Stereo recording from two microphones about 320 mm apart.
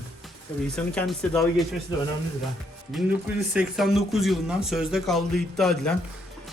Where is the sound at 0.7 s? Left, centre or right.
Centre.